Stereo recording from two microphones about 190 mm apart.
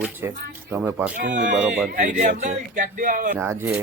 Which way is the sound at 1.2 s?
40° right (ahead or behind).